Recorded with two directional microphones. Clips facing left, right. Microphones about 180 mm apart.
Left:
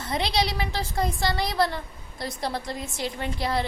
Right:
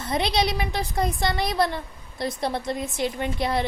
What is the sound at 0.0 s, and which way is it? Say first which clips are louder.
A woman's voice: right 2 dB; 20° right (ahead or behind).